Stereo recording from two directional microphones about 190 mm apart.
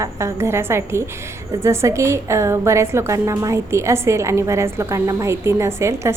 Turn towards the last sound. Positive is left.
turn(degrees=-15)  # may be behind; listen again after turning